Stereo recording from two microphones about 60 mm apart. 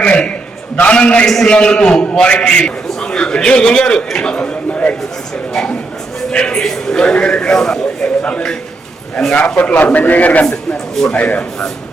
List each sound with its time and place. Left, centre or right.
0.0 s a sound: centre
0.8 s a man's voice: left
1.2 s a man's voice: centre
6.3 s a man's voice: centre
9.6 s a man's voice: left